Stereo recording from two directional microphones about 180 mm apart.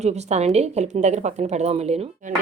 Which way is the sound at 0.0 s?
40° right (ahead or behind).